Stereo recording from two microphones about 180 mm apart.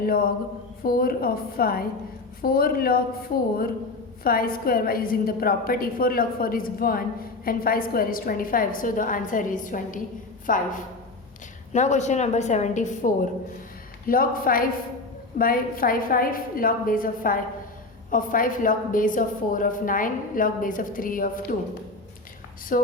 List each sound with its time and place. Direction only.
0.0 s a woman's voice: 55° left (ahead or behind)
4.2 s a woman's voice: 55° left (ahead or behind)
14.1 s a woman's voice: 50° left (ahead or behind)
22.7 s a woman's voice: 50° left (ahead or behind)